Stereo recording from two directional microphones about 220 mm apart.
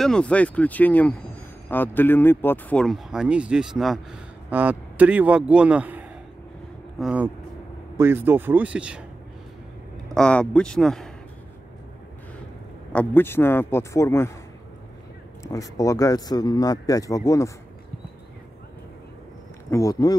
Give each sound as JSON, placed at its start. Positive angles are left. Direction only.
{"t": 0.0, "sound": "speech", "side_deg": 5}
{"t": 10.1, "sound": "speech", "side_deg": 5}
{"t": 12.9, "sound": "speech", "side_deg": 10}
{"t": 15.4, "sound": "speech", "side_deg": 15}
{"t": 19.7, "sound": "speech", "side_deg": 15}